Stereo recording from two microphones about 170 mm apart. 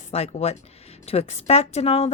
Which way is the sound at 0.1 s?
40° left (ahead or behind).